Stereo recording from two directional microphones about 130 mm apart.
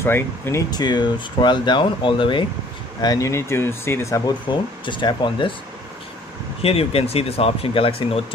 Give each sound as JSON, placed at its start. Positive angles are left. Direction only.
{"t": 0.0, "sound": "speech", "side_deg": 20}
{"t": 0.7, "sound": "speech", "side_deg": 30}
{"t": 3.0, "sound": "speech", "side_deg": 25}
{"t": 4.3, "sound": "speech", "side_deg": 35}
{"t": 6.6, "sound": "speech", "side_deg": 50}